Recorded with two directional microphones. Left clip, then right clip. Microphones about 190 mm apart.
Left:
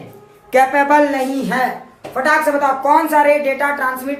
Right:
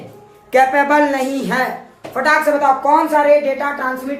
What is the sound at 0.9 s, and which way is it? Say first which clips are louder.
A woman's voice: left 1 dB; 15° right (ahead or behind).